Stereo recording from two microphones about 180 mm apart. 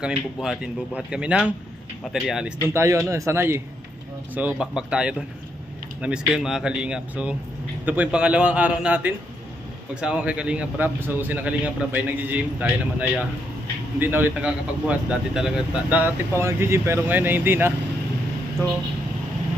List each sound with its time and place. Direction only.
0.0 s speech: 5° right (ahead or behind)
2.7 s speech: 15° right (ahead or behind)
13.9 s speech: 10° right (ahead or behind)